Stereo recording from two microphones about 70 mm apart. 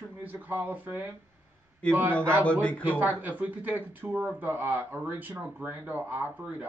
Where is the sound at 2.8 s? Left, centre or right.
Right.